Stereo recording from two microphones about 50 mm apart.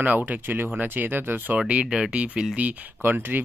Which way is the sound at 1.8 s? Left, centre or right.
Centre.